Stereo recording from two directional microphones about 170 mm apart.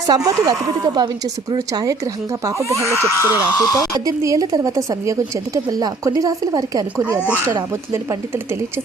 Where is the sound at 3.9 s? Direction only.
20° right (ahead or behind).